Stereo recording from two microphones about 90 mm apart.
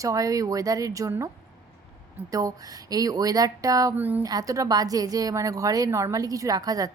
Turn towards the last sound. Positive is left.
turn(degrees=-45)  # may be behind; listen again after turning